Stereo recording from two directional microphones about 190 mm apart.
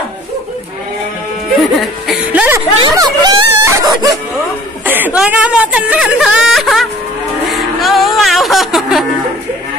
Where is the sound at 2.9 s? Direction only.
20° right (ahead or behind).